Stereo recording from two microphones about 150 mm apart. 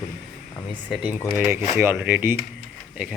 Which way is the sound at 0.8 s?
10° right (ahead or behind).